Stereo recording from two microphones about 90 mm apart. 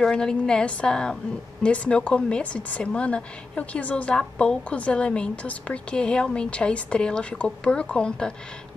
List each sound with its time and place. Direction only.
0.0 s a woman's voice: 10° left (ahead or behind)